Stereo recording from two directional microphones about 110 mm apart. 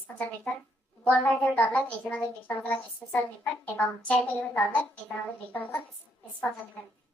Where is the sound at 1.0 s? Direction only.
10° left (ahead or behind).